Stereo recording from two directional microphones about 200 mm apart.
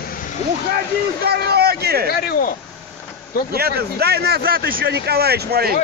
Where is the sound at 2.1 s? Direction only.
50° left (ahead or behind).